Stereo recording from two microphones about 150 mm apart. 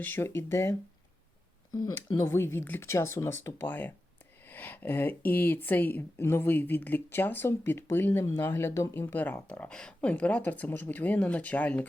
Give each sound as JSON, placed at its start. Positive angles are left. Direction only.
{"t": 0.0, "sound": "speech", "side_deg": 15}